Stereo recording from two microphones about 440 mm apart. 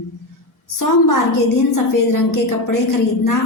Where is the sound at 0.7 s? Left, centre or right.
Left.